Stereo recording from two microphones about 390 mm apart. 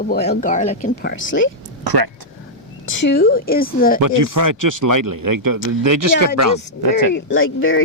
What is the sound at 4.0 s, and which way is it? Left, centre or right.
Speech, right.